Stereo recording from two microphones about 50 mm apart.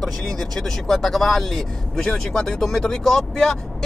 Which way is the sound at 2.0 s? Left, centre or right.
Centre.